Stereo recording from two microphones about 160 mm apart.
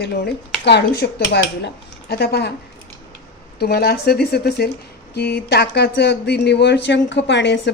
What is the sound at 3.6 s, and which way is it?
Speech, 80° left.